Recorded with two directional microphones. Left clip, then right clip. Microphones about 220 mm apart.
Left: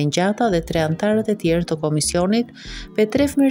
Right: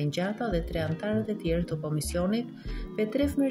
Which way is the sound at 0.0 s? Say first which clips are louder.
Left 12 dB; 45° left (ahead or behind).